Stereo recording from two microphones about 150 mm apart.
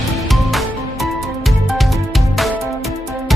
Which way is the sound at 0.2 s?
Centre (ahead or behind).